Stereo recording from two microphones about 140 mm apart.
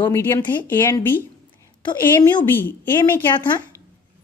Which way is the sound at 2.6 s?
15° left (ahead or behind).